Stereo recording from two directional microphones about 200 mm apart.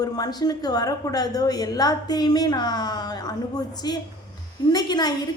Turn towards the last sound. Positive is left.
turn(degrees=20)  # may be behind; listen again after turning